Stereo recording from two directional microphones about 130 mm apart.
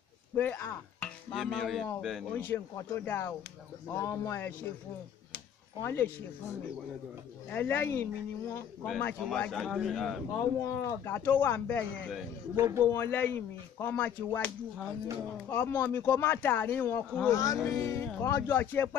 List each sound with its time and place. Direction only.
0.4 s speech: 15° left (ahead or behind)
1.3 s a man's voice: centre (ahead or behind)
2.3 s a man's voice: 15° left (ahead or behind)
5.8 s speech: 20° left (ahead or behind)
7.5 s speech: 15° left (ahead or behind)
9.2 s a man's voice: centre (ahead or behind)
10.6 s speech: 15° left (ahead or behind)
12.5 s speech: 20° right (ahead or behind)
12.9 s speech: 15° left (ahead or behind)
15.5 s a man's voice: 15° left (ahead or behind)
18.0 s speech: 15° left (ahead or behind)